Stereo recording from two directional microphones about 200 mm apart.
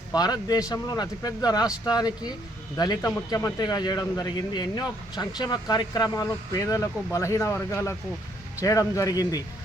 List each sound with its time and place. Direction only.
0.1 s speech: 20° left (ahead or behind)